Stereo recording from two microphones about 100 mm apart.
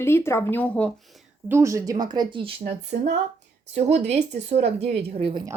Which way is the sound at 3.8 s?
90° right.